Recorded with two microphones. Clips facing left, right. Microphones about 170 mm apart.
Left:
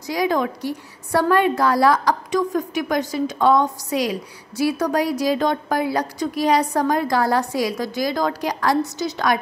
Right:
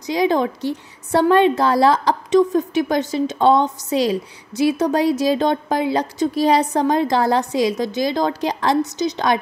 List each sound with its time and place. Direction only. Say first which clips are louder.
0.0 s a woman's voice: right 3 dB; 25° right (ahead or behind)